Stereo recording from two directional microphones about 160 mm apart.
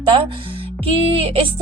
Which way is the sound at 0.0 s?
30° right (ahead or behind).